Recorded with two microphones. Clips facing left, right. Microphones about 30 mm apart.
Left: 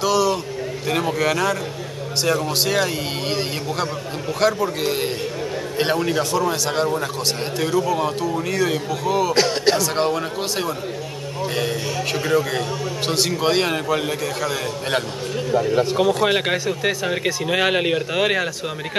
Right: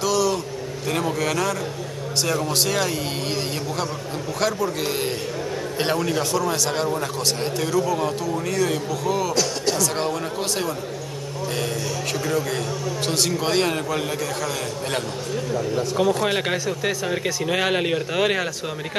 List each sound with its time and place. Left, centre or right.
0.0 s a sound: centre
0.8 s a man's voice: centre
9.3 s speech: left
9.8 s a man's voice: centre
15.5 s speech: left
16.0 s a man's voice: centre